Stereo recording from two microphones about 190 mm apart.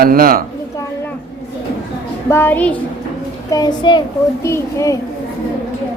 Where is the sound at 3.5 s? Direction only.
20° left (ahead or behind).